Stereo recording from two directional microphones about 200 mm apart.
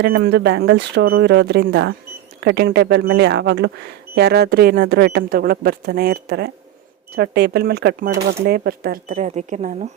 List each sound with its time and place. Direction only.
0.0 s speech: 55° right (ahead or behind)